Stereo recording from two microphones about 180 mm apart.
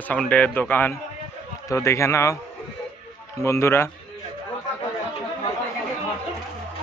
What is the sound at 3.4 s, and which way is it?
Speech, 15° left (ahead or behind).